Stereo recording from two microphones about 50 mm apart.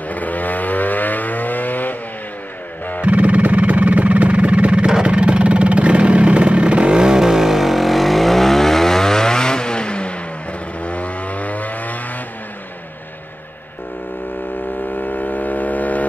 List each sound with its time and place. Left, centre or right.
0.1 s vehicle: left
3.0 s music: right
5.0 s vehicle: right; by 12.0 s left
15.0 s a sound: left